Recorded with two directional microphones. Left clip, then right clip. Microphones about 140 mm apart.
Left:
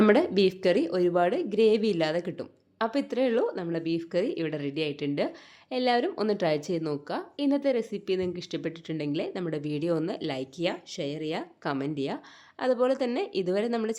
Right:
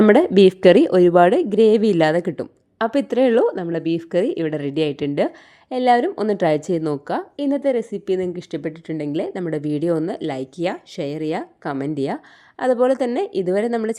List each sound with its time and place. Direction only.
0.1 s a woman's voice: 60° right (ahead or behind)
11.6 s speech: 40° right (ahead or behind)